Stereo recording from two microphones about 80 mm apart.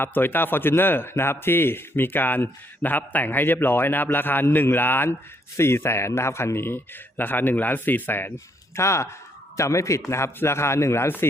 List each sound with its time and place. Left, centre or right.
0.0 s a man's voice: left
8.7 s speech: left